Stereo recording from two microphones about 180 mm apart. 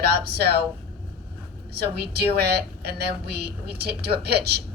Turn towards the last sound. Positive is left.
turn(degrees=-65)  # may be behind; listen again after turning